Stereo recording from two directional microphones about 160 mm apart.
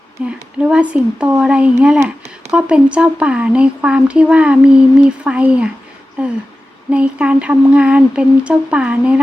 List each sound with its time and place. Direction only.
0.3 s speech: 5° right (ahead or behind)